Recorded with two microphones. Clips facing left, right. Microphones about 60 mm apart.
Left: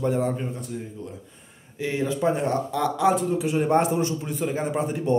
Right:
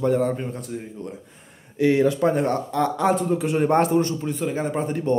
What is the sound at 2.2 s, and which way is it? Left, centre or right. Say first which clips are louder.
Speech: right 2 dB; centre.